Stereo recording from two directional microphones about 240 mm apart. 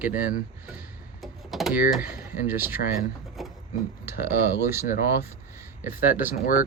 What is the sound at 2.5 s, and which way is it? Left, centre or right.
Speech, centre.